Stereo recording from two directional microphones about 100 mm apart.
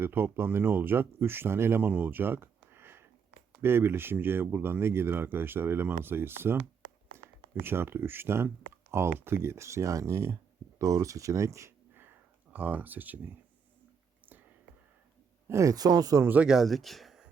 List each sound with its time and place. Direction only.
0.0 s speech: 20° right (ahead or behind)
7.1 s a sound: 25° right (ahead or behind)
7.6 s speech: 20° right (ahead or behind)
12.5 s speech: 15° right (ahead or behind)
15.4 s speech: 30° right (ahead or behind)
16.2 s speech: 15° right (ahead or behind)
16.5 s speech: centre (ahead or behind)